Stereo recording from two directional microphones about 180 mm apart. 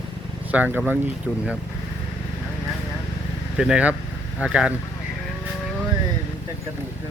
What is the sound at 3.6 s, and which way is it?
Speech, 5° right (ahead or behind).